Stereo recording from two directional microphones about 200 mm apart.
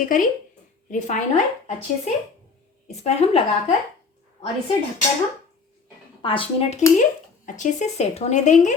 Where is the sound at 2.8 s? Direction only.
30° left (ahead or behind).